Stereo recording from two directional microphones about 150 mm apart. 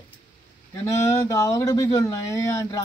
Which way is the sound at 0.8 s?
20° left (ahead or behind).